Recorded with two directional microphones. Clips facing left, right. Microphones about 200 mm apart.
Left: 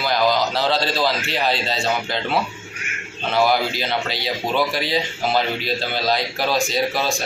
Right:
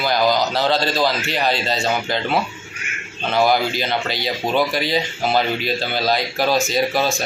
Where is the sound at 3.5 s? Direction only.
Centre (ahead or behind).